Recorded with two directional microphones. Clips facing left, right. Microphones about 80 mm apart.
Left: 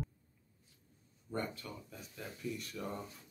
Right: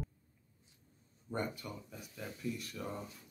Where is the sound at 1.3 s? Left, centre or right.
Centre.